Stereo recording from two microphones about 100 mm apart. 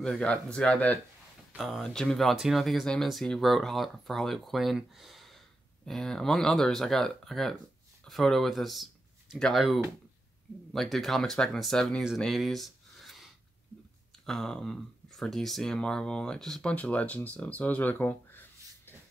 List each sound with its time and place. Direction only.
0.0 s speech: 10° left (ahead or behind)
1.6 s speech: centre (ahead or behind)
12.2 s a sound: centre (ahead or behind)
14.2 s speech: 5° left (ahead or behind)